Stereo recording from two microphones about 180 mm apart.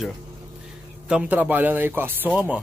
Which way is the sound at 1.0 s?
5° right (ahead or behind).